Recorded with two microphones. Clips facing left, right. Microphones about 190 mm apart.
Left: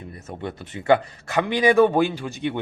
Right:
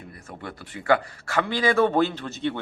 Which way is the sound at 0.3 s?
20° left (ahead or behind).